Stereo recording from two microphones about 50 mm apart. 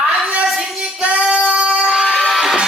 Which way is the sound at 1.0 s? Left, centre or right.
Right.